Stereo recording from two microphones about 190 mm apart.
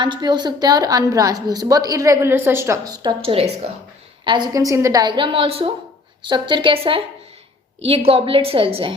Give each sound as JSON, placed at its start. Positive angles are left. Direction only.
{"t": 0.0, "sound": "a woman's voice", "side_deg": -25}